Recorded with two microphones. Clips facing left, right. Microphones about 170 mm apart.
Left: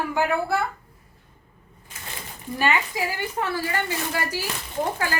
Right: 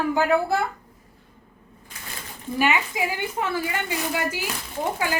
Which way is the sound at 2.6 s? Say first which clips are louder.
Right 1 dB; 15° right (ahead or behind).